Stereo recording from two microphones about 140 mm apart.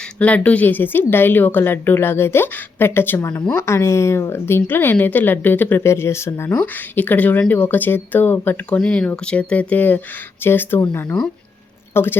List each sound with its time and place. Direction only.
0.2 s speech: 10° left (ahead or behind)